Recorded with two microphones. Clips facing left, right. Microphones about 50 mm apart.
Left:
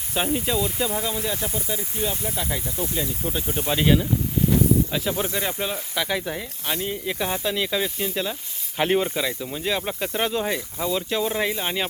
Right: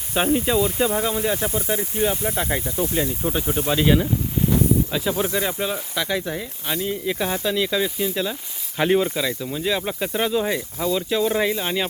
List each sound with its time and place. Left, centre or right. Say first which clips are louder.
0.1 s speech: right 4 dB; centre
3.5 s speech: right 1 dB; centre